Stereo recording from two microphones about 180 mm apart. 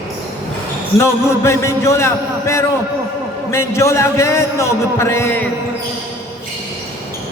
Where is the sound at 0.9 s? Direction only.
15° left (ahead or behind).